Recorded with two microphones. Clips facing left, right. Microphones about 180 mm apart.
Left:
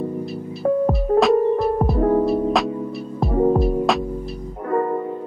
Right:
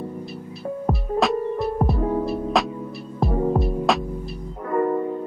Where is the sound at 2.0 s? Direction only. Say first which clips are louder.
Left 6 dB; 50° left (ahead or behind).